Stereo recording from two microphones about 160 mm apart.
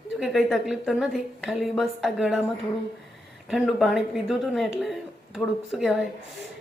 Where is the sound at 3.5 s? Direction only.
Centre (ahead or behind).